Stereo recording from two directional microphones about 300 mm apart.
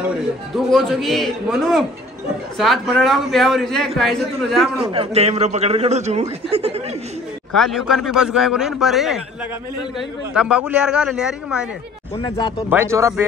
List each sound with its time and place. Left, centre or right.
0.7 s a man's voice: centre
4.8 s a man's voice: centre
7.5 s a man's voice: centre
12.2 s speech: centre
12.5 s speech: centre